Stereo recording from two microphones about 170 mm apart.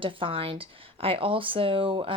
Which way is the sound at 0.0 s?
30° right (ahead or behind).